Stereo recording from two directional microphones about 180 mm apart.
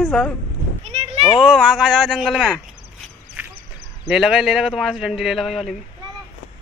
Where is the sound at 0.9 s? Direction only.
35° right (ahead or behind).